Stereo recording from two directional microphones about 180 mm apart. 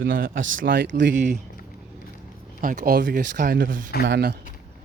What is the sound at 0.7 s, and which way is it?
Speech, 80° right.